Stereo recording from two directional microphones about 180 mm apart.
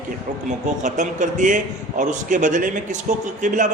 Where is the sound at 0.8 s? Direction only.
45° right (ahead or behind).